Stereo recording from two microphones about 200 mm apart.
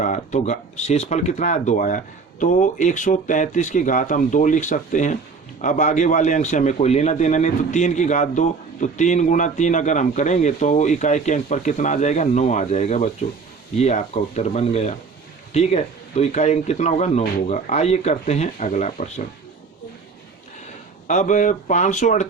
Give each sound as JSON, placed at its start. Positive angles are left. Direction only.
{"t": 0.0, "sound": "a man's voice", "side_deg": 35}
{"t": 21.1, "sound": "a man's voice", "side_deg": 40}